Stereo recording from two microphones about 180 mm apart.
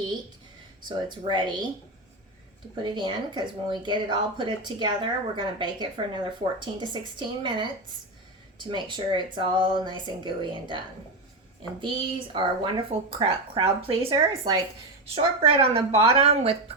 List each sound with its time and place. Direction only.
0.9 s speech: 25° right (ahead or behind)
2.8 s speech: 25° right (ahead or behind)
12.3 s speech: 25° right (ahead or behind)